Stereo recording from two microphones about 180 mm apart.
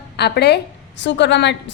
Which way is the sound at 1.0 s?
75° left (ahead or behind).